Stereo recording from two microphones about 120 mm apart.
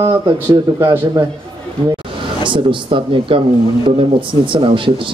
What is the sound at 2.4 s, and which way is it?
Speech, 45° right (ahead or behind).